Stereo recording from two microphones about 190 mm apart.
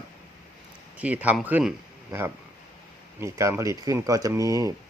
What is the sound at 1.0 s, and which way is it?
Speech, 10° right (ahead or behind).